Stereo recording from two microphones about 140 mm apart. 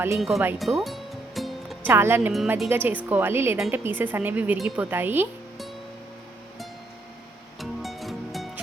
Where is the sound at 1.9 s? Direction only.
15° right (ahead or behind).